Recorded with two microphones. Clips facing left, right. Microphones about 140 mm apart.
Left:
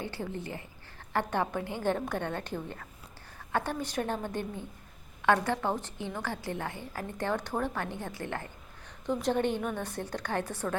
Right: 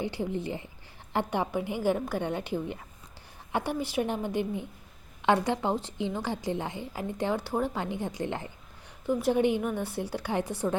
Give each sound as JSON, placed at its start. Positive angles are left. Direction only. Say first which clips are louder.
{"t": 0.0, "sound": "a woman's voice", "louder": "right 5 dB", "side_deg": -15}
{"t": 9.0, "sound": "a woman's voice", "louder": "right 4 dB", "side_deg": -5}